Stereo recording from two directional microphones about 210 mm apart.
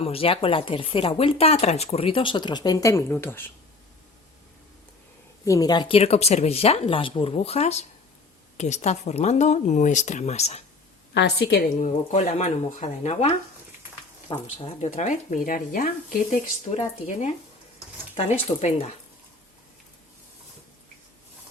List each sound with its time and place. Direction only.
0.0 s speech: 25° left (ahead or behind); by 3.4 s 10° left (ahead or behind)
5.5 s speech: 15° left (ahead or behind)
11.1 s a woman's voice: 55° left (ahead or behind)
11.8 s speech: 35° left (ahead or behind)
18.6 s speech: 30° left (ahead or behind)